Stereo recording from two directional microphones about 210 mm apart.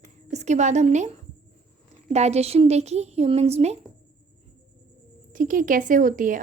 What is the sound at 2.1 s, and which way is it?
Speech, 30° right (ahead or behind).